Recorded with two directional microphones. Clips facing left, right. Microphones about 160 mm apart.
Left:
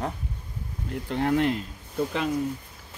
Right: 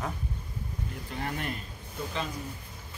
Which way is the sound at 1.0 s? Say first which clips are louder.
Left 12 dB; 80° left.